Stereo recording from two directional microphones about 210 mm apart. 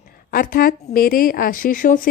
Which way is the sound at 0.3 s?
45° left (ahead or behind).